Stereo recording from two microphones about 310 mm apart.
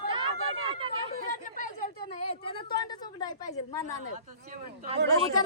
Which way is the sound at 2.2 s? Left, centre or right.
Centre.